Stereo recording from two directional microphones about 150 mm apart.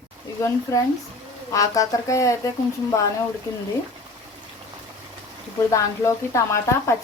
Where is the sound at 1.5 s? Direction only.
20° left (ahead or behind).